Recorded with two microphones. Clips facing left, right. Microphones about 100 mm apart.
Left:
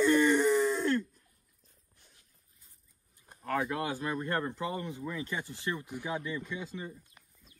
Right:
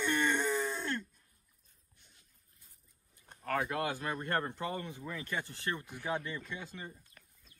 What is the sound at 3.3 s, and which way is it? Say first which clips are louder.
Speech: left 2 dB; 10° left (ahead or behind).